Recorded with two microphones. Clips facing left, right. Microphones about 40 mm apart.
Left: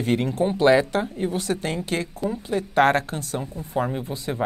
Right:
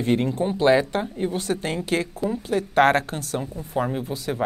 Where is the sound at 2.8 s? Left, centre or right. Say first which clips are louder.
Right 1 dB; centre.